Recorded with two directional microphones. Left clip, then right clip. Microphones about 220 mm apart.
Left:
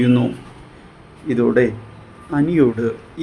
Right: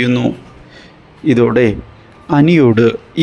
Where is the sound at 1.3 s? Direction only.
35° right (ahead or behind).